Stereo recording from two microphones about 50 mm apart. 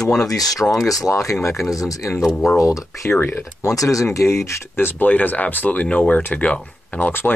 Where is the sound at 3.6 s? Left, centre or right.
Left.